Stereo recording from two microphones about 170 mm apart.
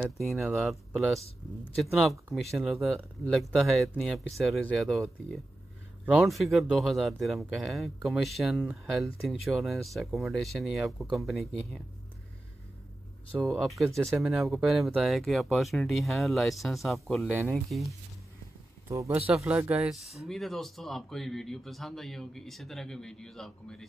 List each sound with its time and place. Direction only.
0.6 s speech: centre (ahead or behind)
6.0 s speech: centre (ahead or behind)
13.4 s speech: centre (ahead or behind)
18.9 s speech: 15° right (ahead or behind); by 23.9 s centre (ahead or behind)